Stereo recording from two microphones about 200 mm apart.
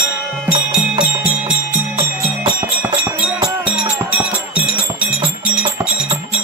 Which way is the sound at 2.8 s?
10° right (ahead or behind).